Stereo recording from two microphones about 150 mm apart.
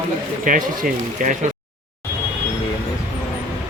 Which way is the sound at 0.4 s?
65° right (ahead or behind).